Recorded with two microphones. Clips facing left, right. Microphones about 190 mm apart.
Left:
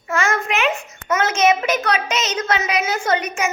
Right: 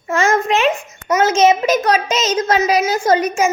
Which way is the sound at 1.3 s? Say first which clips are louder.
Right 4 dB; 25° right (ahead or behind).